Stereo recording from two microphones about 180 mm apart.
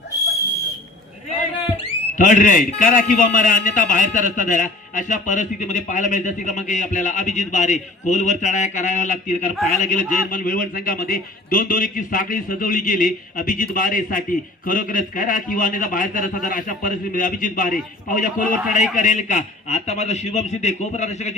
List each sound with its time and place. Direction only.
2.1 s a man's voice: 45° left (ahead or behind)